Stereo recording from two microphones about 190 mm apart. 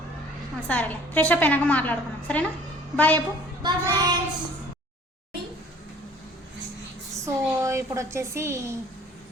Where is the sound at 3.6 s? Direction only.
25° right (ahead or behind).